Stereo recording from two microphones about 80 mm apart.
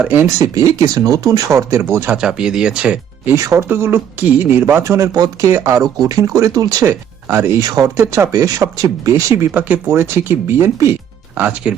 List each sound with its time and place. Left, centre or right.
0.0 s speech: right
0.3 s speech: right
2.1 s speech: centre
3.3 s speech: right
3.7 s speech: right
5.1 s speech: right
5.5 s speech: right
5.8 s speech: right
7.6 s speech: right
7.9 s speech: right
9.5 s speech: centre
9.8 s speech: right
11.3 s speech: centre